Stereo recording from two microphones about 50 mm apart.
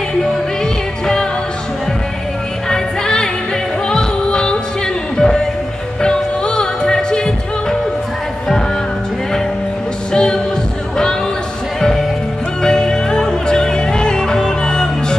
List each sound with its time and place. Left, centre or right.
2.7 s music: centre
10.1 s music: centre
11.8 s music: centre